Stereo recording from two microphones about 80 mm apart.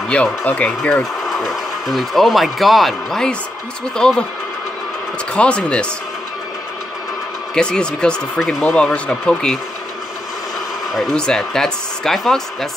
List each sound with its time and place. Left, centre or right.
0.4 s speech: centre
1.2 s speech: centre
5.3 s speech: centre
7.5 s speech: centre
8.6 s speech: centre
11.0 s speech: centre